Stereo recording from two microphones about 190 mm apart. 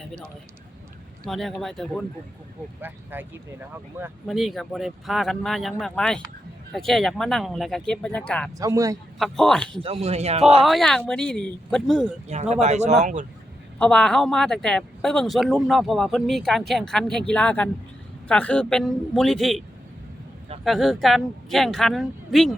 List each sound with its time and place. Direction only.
1.2 s speech: centre (ahead or behind)
2.8 s speech: 10° right (ahead or behind)
4.3 s speech: centre (ahead or behind)
8.5 s speech: 15° right (ahead or behind)
9.1 s speech: centre (ahead or behind)
9.8 s a man's voice: 30° right (ahead or behind)
10.6 s speech: centre (ahead or behind)
12.3 s a man's voice: 35° right (ahead or behind)
13.7 s speech: 5° left (ahead or behind)
20.7 s speech: centre (ahead or behind)